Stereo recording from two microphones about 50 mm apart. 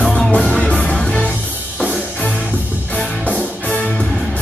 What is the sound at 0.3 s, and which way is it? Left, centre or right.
Music, left.